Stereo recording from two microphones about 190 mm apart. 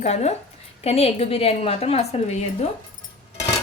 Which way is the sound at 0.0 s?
35° left (ahead or behind).